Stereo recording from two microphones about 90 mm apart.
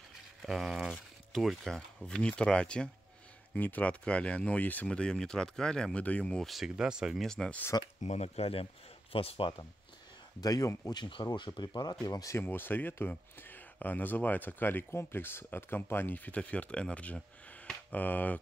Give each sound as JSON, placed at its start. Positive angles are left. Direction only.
{"t": 0.4, "sound": "speech", "side_deg": -5}
{"t": 6.4, "sound": "speech", "side_deg": -5}
{"t": 7.2, "sound": "speech", "side_deg": 5}
{"t": 7.7, "sound": "speech", "side_deg": 45}
{"t": 9.1, "sound": "speech", "side_deg": 90}
{"t": 10.4, "sound": "speech", "side_deg": 45}
{"t": 10.9, "sound": "speech", "side_deg": 55}
{"t": 12.4, "sound": "speech", "side_deg": 25}